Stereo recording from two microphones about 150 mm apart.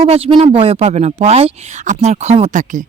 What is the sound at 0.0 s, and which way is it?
Speech, 40° right (ahead or behind).